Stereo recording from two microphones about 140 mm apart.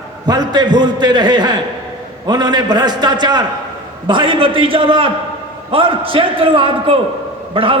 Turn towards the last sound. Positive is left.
turn(degrees=-40)  # may be behind; listen again after turning